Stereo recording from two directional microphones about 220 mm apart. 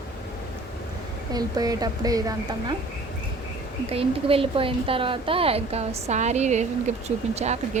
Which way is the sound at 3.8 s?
25° right (ahead or behind).